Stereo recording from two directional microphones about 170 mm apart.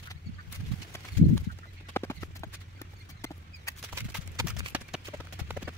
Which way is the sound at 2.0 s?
15° left (ahead or behind).